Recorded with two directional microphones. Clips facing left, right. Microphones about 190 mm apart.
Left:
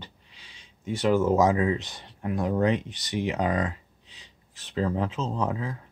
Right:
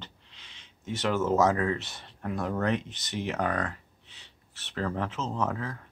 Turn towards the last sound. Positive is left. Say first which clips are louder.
# left 2 dB
turn(degrees=15)  # may be behind; listen again after turning